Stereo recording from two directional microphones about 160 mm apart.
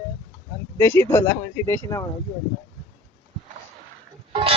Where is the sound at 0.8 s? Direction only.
15° left (ahead or behind).